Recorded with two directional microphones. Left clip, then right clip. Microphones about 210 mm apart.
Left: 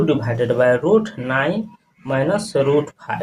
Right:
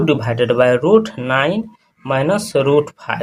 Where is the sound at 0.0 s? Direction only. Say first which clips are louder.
Right 3 dB; 30° right (ahead or behind).